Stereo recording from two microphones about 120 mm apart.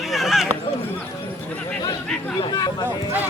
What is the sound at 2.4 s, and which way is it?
Speech, 35° left (ahead or behind).